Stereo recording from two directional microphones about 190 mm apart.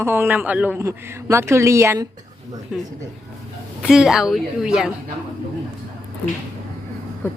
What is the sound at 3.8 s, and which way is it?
A woman's voice, centre (ahead or behind).